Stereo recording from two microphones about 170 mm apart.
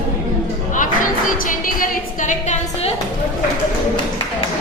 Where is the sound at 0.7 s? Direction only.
50° left (ahead or behind).